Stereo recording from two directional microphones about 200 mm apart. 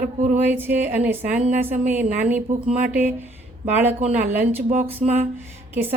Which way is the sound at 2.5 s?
40° right (ahead or behind).